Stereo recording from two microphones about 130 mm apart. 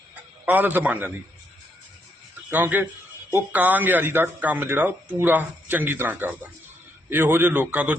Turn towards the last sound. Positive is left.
turn(degrees=-10)  # may be behind; listen again after turning